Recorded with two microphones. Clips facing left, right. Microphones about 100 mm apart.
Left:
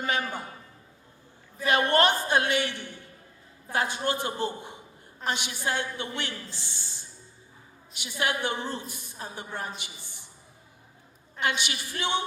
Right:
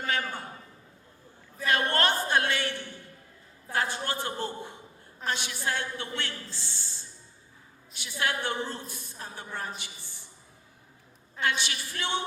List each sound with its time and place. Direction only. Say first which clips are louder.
0.0 s a woman's voice: left 2 dB; 15° left (ahead or behind)
1.5 s a woman's voice: left 4 dB; 15° left (ahead or behind)
11.3 s a woman's voice: left 1 dB; 15° left (ahead or behind)